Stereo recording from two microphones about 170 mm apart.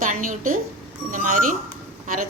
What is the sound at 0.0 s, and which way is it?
A woman's voice, 55° right (ahead or behind).